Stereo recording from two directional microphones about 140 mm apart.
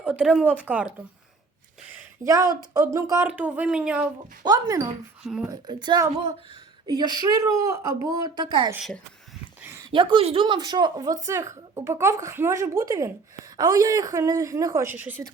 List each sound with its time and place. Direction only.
0.0 s speech: 10° right (ahead or behind)
2.2 s speech: 25° right (ahead or behind); by 4.0 s 5° right (ahead or behind)
4.4 s speech: 25° right (ahead or behind)
5.2 s speech: 5° right (ahead or behind)
5.5 s a woman's voice: 30° right (ahead or behind)
9.9 s speech: 35° right (ahead or behind); by 15.2 s 15° right (ahead or behind)